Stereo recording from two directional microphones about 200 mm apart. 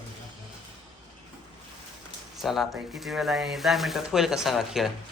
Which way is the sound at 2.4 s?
Centre (ahead or behind).